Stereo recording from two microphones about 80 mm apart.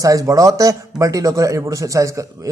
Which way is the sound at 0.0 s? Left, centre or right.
Right.